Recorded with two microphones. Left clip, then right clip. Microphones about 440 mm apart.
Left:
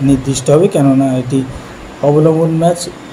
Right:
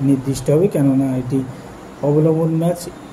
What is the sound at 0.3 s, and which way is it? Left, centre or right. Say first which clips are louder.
Speech: left 7 dB; right.